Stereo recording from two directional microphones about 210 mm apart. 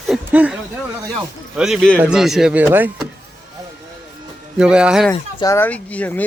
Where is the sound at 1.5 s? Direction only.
Centre (ahead or behind).